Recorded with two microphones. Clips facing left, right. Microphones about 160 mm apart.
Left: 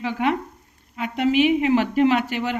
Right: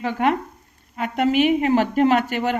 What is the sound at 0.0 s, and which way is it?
Speech, 50° right (ahead or behind).